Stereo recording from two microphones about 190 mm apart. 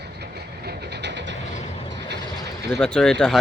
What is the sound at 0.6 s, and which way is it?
Train, 65° right (ahead or behind).